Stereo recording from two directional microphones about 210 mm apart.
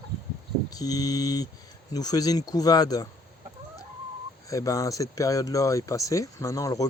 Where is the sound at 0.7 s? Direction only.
15° left (ahead or behind).